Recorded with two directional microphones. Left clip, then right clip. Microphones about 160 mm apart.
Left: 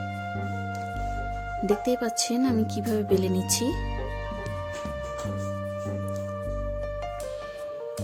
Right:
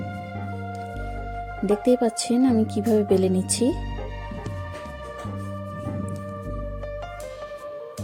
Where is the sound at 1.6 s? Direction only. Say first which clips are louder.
Right 5 dB; 25° right (ahead or behind).